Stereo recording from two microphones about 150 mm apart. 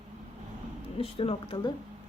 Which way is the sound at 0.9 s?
40° left (ahead or behind).